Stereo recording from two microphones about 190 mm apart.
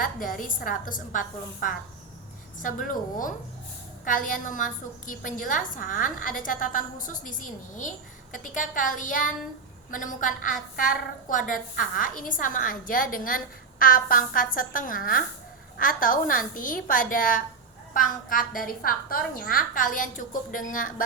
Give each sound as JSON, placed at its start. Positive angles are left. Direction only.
{"t": 0.0, "sound": "a woman's voice", "side_deg": 45}
{"t": 2.6, "sound": "a woman's voice", "side_deg": 45}